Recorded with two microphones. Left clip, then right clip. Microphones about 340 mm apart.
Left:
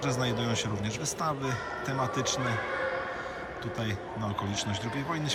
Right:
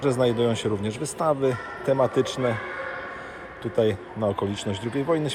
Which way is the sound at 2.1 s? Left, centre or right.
Centre.